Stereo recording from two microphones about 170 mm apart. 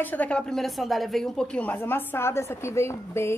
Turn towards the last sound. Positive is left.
turn(degrees=15)  # may be behind; listen again after turning